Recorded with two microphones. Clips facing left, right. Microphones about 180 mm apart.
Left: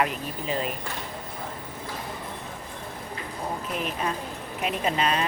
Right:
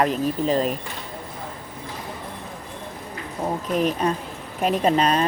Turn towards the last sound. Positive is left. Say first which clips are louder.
# right 6 dB
turn(degrees=-40)  # may be behind; listen again after turning